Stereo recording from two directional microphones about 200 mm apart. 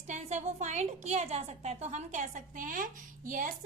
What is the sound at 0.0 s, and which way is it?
A woman's voice, 35° right (ahead or behind).